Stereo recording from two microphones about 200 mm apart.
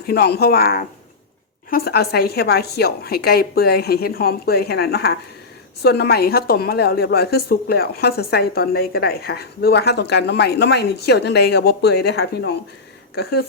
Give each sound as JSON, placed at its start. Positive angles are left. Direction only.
{"t": 0.1, "sound": "a woman's voice", "side_deg": 50}